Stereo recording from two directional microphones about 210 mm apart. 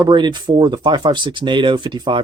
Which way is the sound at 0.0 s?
20° right (ahead or behind).